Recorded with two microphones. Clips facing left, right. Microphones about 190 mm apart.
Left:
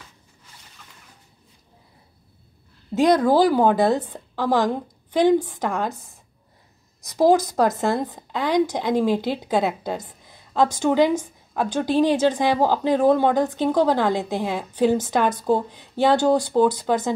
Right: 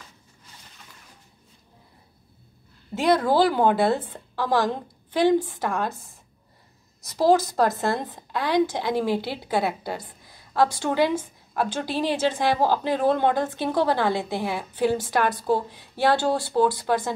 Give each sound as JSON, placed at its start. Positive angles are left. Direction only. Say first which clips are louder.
{"t": 2.9, "sound": "a woman's voice", "louder": "left 4 dB", "side_deg": 15}
{"t": 7.2, "sound": "a woman's voice", "louder": "left 2 dB", "side_deg": 15}